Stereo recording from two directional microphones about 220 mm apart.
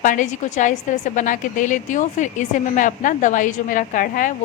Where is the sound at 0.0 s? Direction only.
35° left (ahead or behind).